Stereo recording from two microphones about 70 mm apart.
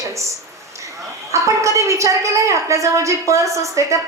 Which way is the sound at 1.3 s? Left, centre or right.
Right.